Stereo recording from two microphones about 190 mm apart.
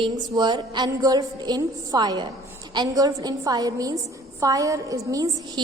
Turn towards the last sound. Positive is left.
turn(degrees=-20)  # may be behind; listen again after turning